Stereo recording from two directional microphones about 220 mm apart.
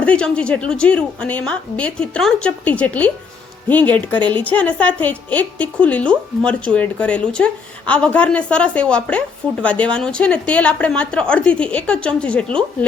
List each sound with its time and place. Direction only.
0.0 s a woman's voice: 5° left (ahead or behind)